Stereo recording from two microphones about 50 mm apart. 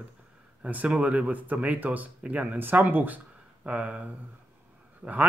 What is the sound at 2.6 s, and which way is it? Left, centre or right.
A woman's voice, right.